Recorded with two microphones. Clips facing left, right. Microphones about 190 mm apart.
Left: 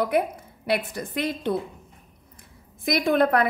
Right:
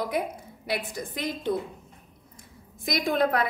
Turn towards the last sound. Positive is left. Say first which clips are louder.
# left 4 dB
turn(degrees=55)  # may be behind; listen again after turning